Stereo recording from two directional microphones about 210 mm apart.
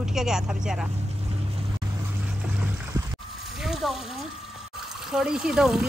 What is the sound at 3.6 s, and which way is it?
A woman's voice, centre (ahead or behind).